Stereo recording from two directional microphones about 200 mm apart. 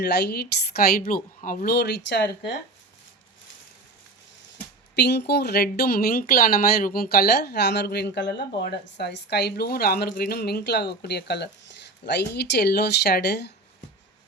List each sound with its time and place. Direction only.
0.0 s speech: 55° left (ahead or behind)
4.9 s speech: 55° left (ahead or behind)